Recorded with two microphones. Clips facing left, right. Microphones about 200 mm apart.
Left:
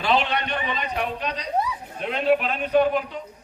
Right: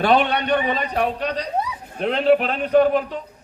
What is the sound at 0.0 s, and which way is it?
A man's voice, 55° right (ahead or behind).